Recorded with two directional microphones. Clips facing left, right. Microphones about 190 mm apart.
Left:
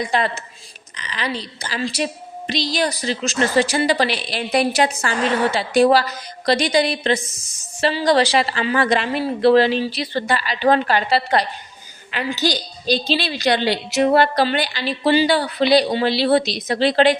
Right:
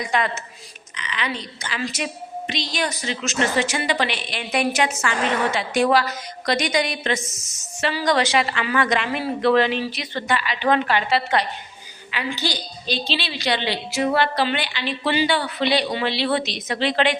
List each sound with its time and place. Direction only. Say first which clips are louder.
0.0 s a woman's voice: left 2 dB; 30° left (ahead or behind)